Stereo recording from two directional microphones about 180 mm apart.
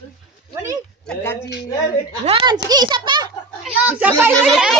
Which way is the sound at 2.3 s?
25° right (ahead or behind).